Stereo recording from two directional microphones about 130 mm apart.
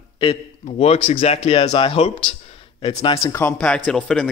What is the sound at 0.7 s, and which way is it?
Speech, 55° left (ahead or behind).